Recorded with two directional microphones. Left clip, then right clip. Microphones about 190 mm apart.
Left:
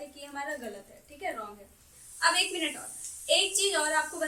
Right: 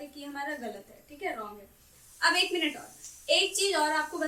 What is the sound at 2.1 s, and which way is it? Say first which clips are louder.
A woman's voice: right 1 dB; 15° right (ahead or behind).